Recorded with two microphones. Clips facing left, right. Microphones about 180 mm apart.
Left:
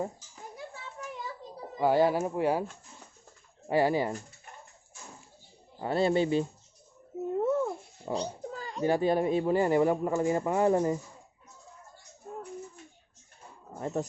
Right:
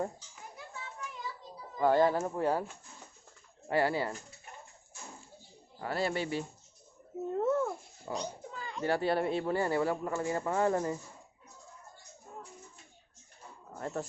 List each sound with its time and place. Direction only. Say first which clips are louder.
1.8 s speech: left 2 dB; 10° left (ahead or behind)
3.7 s speech: left 4 dB; 15° left (ahead or behind)
5.8 s speech: left 7 dB; 25° left (ahead or behind)
7.3 s dog: left 2 dB; 15° left (ahead or behind)
8.1 s cat: left 5 dB; 35° left (ahead or behind)
8.8 s speech: left 4 dB; 15° left (ahead or behind)
12.3 s a sound: left 7 dB; 55° left (ahead or behind)
13.7 s speech: left 5 dB; 20° left (ahead or behind)